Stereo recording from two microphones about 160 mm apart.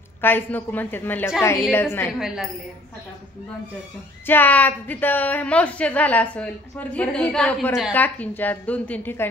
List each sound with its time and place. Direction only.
0.2 s a woman's voice: 10° left (ahead or behind)
2.1 s a woman's voice: 5° right (ahead or behind)
4.3 s a woman's voice: 10° left (ahead or behind)
7.9 s a woman's voice: 10° left (ahead or behind)